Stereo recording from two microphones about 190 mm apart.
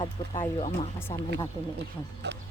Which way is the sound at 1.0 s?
10° left (ahead or behind).